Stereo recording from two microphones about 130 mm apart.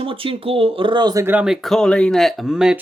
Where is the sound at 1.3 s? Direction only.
10° right (ahead or behind).